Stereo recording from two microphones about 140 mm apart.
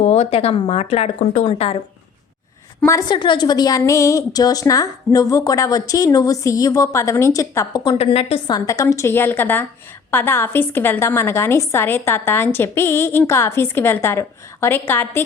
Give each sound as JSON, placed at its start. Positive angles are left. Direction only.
{"t": 0.0, "sound": "speech", "side_deg": 50}
{"t": 1.5, "sound": "speech", "side_deg": 45}
{"t": 3.1, "sound": "a woman's voice", "side_deg": 35}
{"t": 7.9, "sound": "speech", "side_deg": 45}
{"t": 8.4, "sound": "a woman's voice", "side_deg": 25}